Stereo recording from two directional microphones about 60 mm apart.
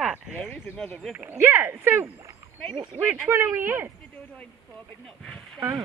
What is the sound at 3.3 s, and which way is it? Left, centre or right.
Speech, right.